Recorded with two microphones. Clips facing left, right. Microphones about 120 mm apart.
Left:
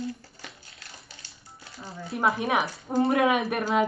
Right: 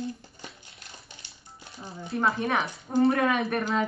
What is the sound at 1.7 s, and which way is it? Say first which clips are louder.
Speech: left 1 dB; 20° right (ahead or behind).